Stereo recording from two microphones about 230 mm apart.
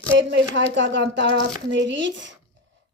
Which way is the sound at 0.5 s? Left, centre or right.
Right.